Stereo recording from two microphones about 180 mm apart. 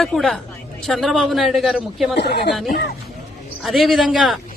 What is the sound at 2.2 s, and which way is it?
Speech, 65° left (ahead or behind).